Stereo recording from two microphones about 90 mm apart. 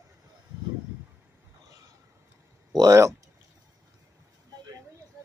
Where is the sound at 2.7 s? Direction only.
35° right (ahead or behind).